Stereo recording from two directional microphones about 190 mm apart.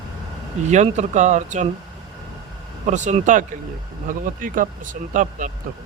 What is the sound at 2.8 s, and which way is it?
Speech, 40° right (ahead or behind).